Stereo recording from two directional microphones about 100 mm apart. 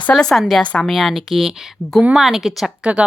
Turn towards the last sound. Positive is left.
turn(degrees=-10)  # may be behind; listen again after turning